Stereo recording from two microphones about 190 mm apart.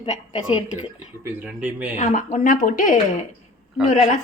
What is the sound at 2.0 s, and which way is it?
A woman's voice, 40° left (ahead or behind).